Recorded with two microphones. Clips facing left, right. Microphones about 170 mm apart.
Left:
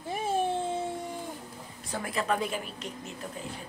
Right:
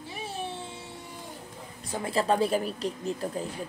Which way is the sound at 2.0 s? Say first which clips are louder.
Right 5 dB; 30° right (ahead or behind).